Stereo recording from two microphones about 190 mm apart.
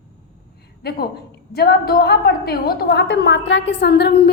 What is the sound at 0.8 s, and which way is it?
A woman's voice, 55° left (ahead or behind).